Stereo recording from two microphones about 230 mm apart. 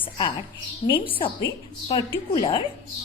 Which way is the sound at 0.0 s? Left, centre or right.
Left.